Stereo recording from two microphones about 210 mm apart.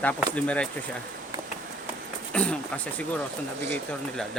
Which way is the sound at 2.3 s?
5° left (ahead or behind).